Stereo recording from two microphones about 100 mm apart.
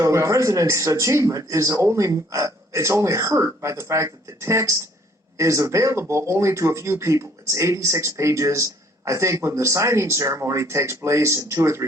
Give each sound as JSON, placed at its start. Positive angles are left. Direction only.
{"t": 0.0, "sound": "speech", "side_deg": -30}